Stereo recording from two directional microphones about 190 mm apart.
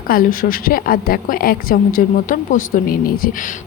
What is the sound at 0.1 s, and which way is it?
A woman's voice, 50° left (ahead or behind).